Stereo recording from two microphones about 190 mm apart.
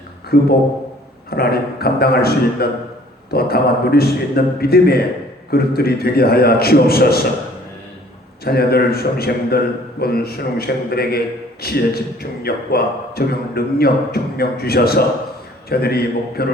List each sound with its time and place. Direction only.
0.3 s a man's voice: 55° left (ahead or behind)
8.4 s a man's voice: 55° left (ahead or behind)